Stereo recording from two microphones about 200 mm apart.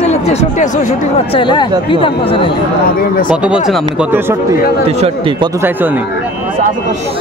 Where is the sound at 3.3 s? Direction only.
5° right (ahead or behind).